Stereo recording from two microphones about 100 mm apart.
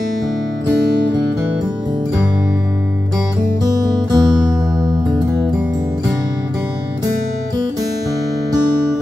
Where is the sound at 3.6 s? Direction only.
40° right (ahead or behind).